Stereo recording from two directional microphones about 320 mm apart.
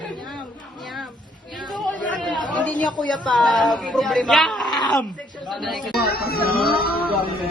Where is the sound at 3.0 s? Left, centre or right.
Centre.